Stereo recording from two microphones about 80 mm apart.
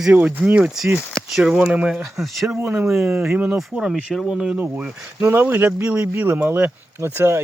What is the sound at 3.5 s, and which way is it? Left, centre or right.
Speech, centre.